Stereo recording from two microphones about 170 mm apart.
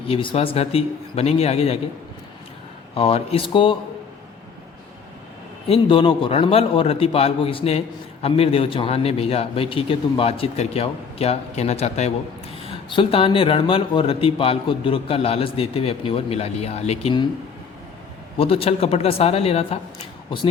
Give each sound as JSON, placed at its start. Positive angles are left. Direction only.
{"t": 0.1, "sound": "speech", "side_deg": 30}
{"t": 2.9, "sound": "speech", "side_deg": 35}
{"t": 5.6, "sound": "speech", "side_deg": 35}
{"t": 18.3, "sound": "speech", "side_deg": 35}